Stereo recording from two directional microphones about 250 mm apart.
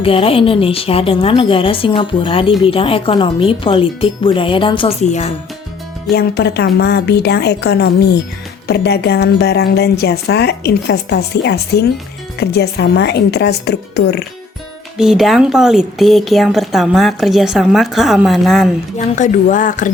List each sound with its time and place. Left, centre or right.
0.0 s a woman's voice: left
6.1 s speech: left
14.9 s speech: centre
18.9 s speech: left